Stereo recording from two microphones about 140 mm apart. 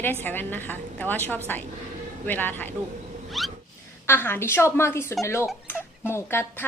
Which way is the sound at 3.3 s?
Centre (ahead or behind).